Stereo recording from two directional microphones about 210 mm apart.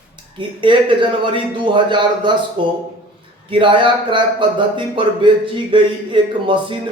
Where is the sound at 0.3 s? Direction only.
25° right (ahead or behind).